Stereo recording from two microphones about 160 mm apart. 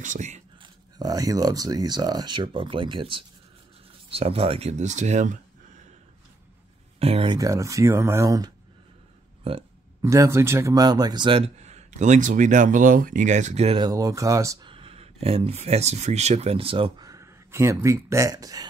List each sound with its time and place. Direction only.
0.0 s a man's voice: 50° right (ahead or behind)
0.6 s a man's voice: 25° right (ahead or behind); by 5.4 s 50° right (ahead or behind)
7.0 s speech: 35° right (ahead or behind)
7.3 s speech: 20° right (ahead or behind)
9.4 s speech: 35° right (ahead or behind)
10.0 s a man's voice: 20° right (ahead or behind); by 13.7 s 45° right (ahead or behind)
13.7 s speech: 25° right (ahead or behind)
14.7 s speech: 35° right (ahead or behind)